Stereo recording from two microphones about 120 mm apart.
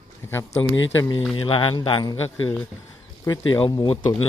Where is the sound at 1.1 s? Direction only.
45° left (ahead or behind).